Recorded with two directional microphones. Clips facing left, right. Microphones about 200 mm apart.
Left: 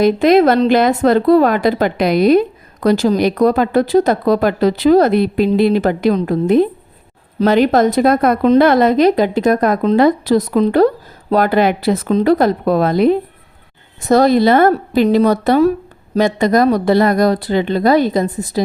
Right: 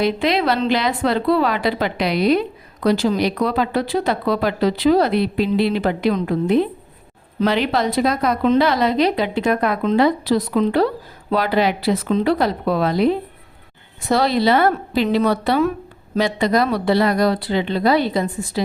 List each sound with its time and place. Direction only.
0.0 s a woman's voice: 45° left (ahead or behind)